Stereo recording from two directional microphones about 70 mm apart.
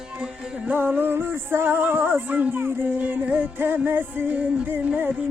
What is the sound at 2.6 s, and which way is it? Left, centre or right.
Music, right.